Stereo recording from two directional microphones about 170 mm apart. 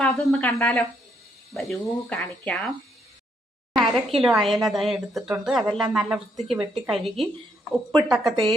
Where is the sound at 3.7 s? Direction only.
Centre (ahead or behind).